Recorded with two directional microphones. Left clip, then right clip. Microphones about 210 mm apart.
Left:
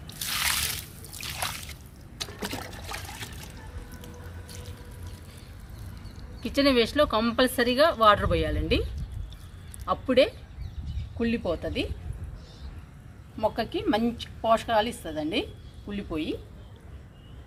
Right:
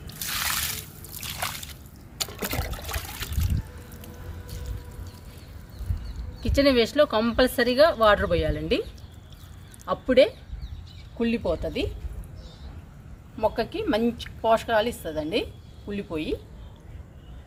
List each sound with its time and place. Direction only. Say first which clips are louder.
0.3 s a sound: left 1 dB; centre (ahead or behind)
2.1 s liquid: right 4 dB; 35° right (ahead or behind)
6.4 s speech: right 2 dB; 10° right (ahead or behind)
9.8 s speech: right 3 dB; 15° right (ahead or behind)
13.4 s speech: right 2 dB; 15° right (ahead or behind)